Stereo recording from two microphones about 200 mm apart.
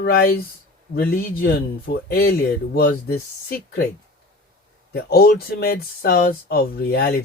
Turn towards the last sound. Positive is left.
turn(degrees=55)  # may be behind; listen again after turning